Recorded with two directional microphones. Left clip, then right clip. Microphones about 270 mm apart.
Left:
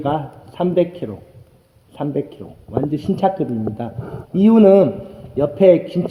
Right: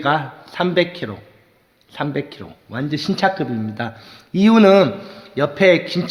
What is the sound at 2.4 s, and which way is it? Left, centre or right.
A man's voice, right.